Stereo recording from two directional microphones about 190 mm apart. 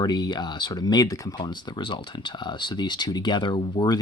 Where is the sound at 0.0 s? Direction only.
20° left (ahead or behind).